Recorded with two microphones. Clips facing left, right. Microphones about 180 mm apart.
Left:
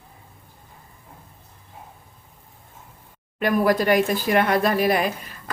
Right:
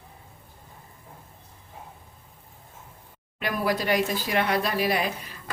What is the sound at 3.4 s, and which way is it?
Speech, 50° left (ahead or behind).